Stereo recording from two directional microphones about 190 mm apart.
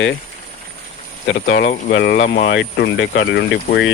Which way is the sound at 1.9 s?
55° left (ahead or behind).